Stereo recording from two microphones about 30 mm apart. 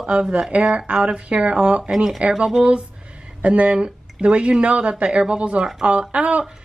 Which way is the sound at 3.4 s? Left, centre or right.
Right.